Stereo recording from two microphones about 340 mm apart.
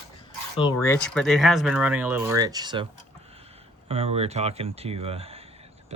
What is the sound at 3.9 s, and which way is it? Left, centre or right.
Speech, centre.